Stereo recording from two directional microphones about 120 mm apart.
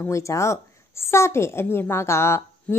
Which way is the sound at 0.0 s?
25° left (ahead or behind).